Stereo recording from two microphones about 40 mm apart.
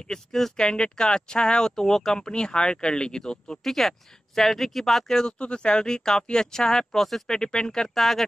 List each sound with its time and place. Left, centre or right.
0.1 s speech: centre
0.7 s speech: left
3.6 s speech: centre
5.4 s speech: left; by 7.3 s centre
7.3 s speech: centre
7.9 s speech: centre